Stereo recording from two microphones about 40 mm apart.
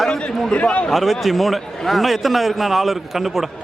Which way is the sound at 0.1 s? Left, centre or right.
Left.